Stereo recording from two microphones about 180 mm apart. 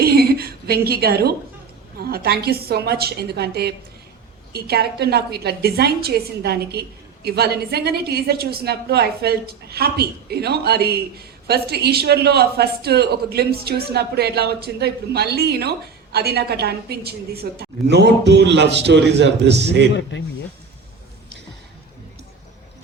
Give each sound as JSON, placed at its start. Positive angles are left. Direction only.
{"t": 0.0, "sound": "a sound", "side_deg": -60}
{"t": 2.0, "sound": "a woman's voice", "side_deg": -60}
{"t": 20.1, "sound": "speech", "side_deg": 75}